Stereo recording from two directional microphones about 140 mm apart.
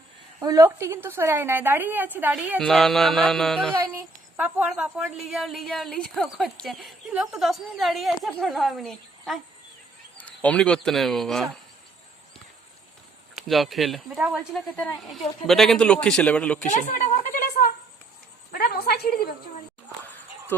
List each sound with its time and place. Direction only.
0.4 s a woman's voice: 20° right (ahead or behind)
2.6 s a woman's voice: 5° left (ahead or behind)
4.4 s a woman's voice: 10° right (ahead or behind)
13.3 s a woman's voice: centre (ahead or behind)
16.6 s a woman's voice: 60° left (ahead or behind); by 19.3 s 90° left
20.5 s a man's voice: 15° left (ahead or behind)